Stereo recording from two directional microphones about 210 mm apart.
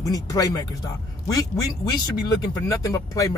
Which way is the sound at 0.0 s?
15° left (ahead or behind).